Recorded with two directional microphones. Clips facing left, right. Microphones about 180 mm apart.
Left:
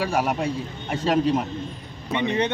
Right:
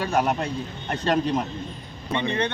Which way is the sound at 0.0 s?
5° left (ahead or behind).